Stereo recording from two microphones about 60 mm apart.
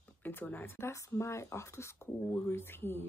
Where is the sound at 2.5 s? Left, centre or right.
Left.